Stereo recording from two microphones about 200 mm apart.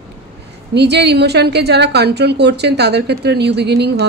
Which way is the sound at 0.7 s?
55° right (ahead or behind).